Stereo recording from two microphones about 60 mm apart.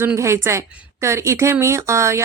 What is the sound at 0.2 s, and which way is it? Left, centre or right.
Speech, right.